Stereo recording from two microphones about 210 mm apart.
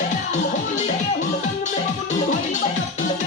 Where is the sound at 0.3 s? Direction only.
35° left (ahead or behind).